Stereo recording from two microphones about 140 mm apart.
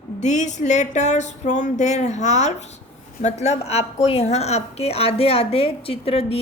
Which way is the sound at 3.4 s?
50° left (ahead or behind).